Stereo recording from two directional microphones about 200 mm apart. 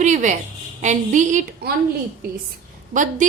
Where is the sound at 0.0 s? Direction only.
35° right (ahead or behind).